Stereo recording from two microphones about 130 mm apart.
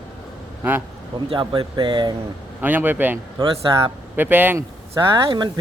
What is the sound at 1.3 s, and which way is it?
Speech, 40° right (ahead or behind).